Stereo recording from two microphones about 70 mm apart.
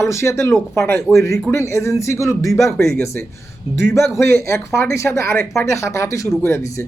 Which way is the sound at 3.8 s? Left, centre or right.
Left.